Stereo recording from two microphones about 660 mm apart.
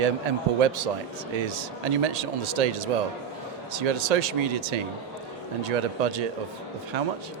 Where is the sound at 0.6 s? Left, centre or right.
Right.